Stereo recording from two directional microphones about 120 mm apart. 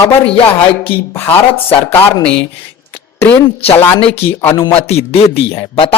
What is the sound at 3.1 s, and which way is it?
Speech, 20° left (ahead or behind).